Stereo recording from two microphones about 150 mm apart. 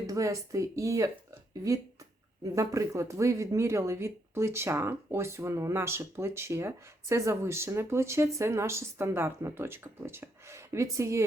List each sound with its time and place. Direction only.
0.1 s speech: 20° right (ahead or behind)